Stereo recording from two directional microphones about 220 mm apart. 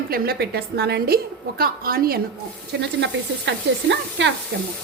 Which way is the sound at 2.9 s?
55° right (ahead or behind).